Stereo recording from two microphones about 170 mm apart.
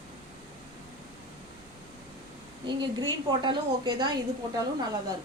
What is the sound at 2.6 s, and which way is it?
A woman's voice, 25° right (ahead or behind).